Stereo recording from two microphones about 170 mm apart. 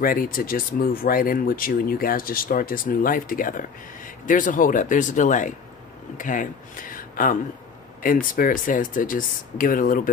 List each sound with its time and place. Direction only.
0.0 s speech: 55° left (ahead or behind)